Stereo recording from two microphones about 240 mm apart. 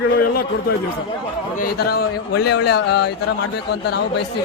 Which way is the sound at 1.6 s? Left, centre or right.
Left.